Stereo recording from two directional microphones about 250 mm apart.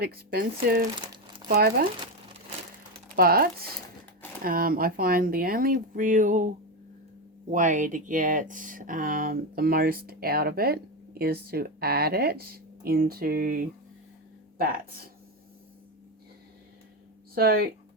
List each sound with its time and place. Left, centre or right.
0.0 s speech: right
0.9 s crumpling: centre
1.5 s speech: right
3.2 s speech: right
7.5 s speech: right
17.3 s speech: right